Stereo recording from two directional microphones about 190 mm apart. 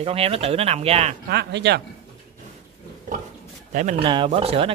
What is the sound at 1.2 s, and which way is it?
Speech, 60° right (ahead or behind).